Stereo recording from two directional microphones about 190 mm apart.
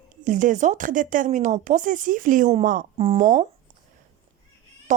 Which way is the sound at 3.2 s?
40° right (ahead or behind).